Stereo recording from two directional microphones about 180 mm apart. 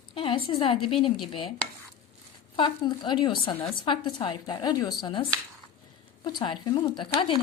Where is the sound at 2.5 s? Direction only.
25° left (ahead or behind).